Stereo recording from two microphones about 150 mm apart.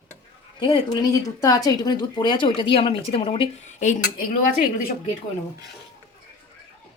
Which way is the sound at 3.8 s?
55° left (ahead or behind).